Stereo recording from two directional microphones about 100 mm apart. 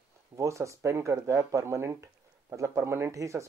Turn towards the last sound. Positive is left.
turn(degrees=-30)  # may be behind; listen again after turning